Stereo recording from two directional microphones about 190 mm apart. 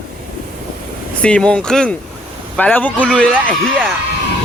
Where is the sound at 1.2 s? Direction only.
5° left (ahead or behind).